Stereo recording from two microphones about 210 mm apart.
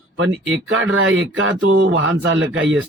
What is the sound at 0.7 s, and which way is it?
A man's voice, 70° right (ahead or behind).